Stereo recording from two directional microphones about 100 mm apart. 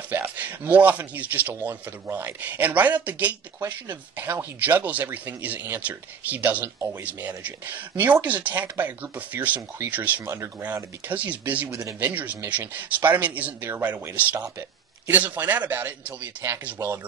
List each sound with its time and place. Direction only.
0.1 s speech: 15° right (ahead or behind)
10.2 s speech: 30° right (ahead or behind)
10.7 s speech: 15° right (ahead or behind)